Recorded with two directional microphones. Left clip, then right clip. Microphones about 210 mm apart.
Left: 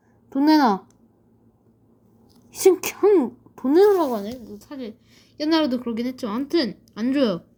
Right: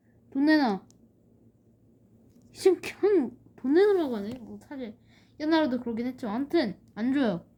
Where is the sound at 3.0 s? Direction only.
55° left (ahead or behind).